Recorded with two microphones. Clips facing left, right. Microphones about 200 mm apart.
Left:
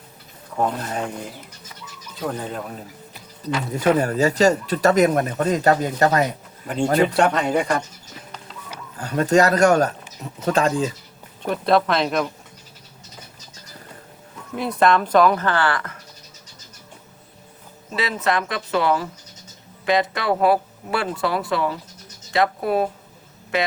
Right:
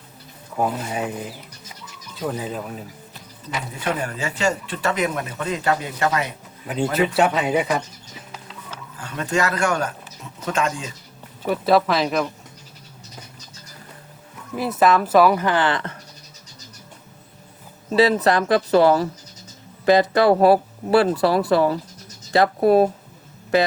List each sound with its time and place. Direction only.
0.6 s speech: 5° right (ahead or behind)
3.8 s speech: 40° left (ahead or behind)
7.1 s speech: 5° right (ahead or behind)
9.0 s speech: 40° left (ahead or behind)
11.4 s speech: 5° right (ahead or behind)
14.5 s a woman's voice: 5° right (ahead or behind); by 16.0 s 25° right (ahead or behind)
17.9 s speech: 35° right (ahead or behind)